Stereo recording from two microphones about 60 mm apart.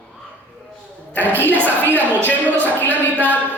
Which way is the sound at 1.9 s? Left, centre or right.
Left.